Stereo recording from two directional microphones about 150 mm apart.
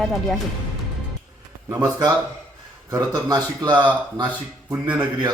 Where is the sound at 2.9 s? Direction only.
25° right (ahead or behind).